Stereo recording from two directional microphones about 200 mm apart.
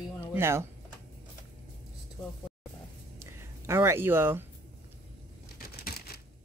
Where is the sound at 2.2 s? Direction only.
20° left (ahead or behind).